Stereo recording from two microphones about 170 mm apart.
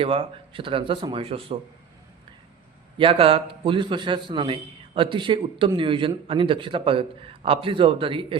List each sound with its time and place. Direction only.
0.0 s a man's voice: 30° right (ahead or behind)
3.0 s a man's voice: 35° right (ahead or behind)